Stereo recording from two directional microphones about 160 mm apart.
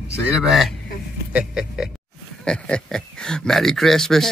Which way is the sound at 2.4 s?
5° left (ahead or behind).